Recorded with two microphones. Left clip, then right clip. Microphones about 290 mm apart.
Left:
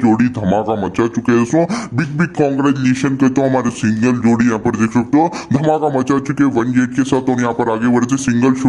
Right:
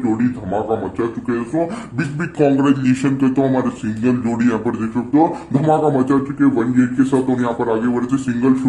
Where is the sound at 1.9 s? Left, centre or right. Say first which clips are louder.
Left 1 dB; left.